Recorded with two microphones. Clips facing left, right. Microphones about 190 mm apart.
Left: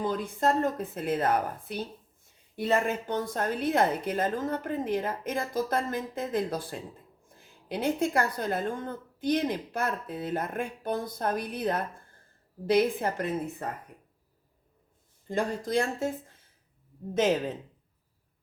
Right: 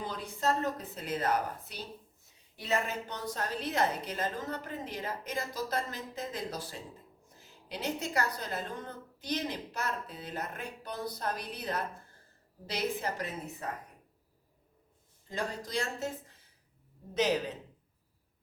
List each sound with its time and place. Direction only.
0.0 s a woman's voice: 50° left (ahead or behind)
15.3 s a woman's voice: 50° left (ahead or behind)